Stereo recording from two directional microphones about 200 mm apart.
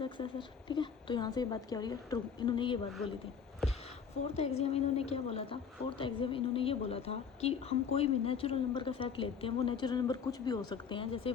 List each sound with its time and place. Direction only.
0.0 s a woman's voice: 25° left (ahead or behind)
4.4 s a woman's voice: 30° left (ahead or behind)